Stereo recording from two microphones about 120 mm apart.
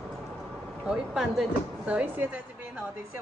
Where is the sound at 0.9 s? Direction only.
5° right (ahead or behind).